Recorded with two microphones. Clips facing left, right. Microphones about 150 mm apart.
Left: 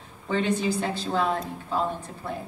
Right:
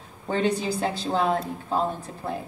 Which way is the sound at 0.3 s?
40° right (ahead or behind).